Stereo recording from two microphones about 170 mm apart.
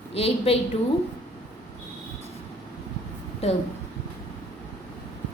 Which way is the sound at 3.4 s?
35° left (ahead or behind).